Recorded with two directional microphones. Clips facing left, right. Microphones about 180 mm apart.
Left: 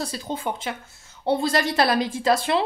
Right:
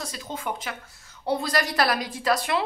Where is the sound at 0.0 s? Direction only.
30° left (ahead or behind).